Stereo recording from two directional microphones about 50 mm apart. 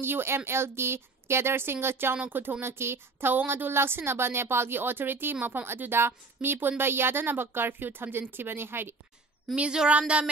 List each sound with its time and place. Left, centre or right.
0.0 s speech: right
2.2 s speech: right
9.6 s speech: right